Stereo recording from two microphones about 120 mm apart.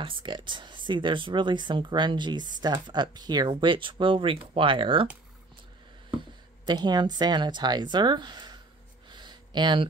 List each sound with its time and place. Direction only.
0.0 s speech: 45° right (ahead or behind)
6.0 s speech: 40° right (ahead or behind)
9.1 s a sound: 40° right (ahead or behind)